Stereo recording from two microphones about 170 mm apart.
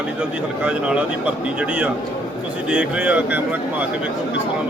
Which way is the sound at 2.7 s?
10° right (ahead or behind).